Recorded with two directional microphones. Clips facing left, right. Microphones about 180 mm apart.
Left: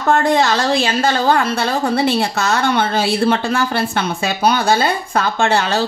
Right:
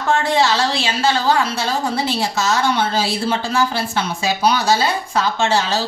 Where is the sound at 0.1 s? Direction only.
50° left (ahead or behind).